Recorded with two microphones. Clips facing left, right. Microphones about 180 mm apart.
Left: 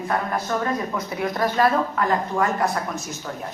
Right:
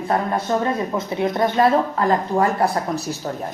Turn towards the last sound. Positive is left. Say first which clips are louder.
# right 4 dB
turn(degrees=-35)  # may be behind; listen again after turning